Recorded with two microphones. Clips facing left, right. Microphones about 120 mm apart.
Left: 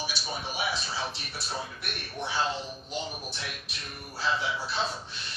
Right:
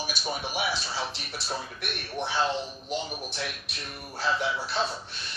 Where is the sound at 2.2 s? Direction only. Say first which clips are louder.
Right 3 dB; 80° right.